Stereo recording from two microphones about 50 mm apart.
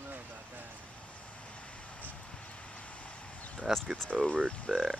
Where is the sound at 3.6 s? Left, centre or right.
Centre.